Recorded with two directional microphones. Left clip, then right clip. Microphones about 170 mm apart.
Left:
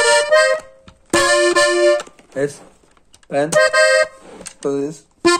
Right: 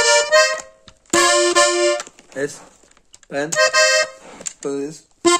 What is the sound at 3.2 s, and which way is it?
Accordion, 10° right (ahead or behind).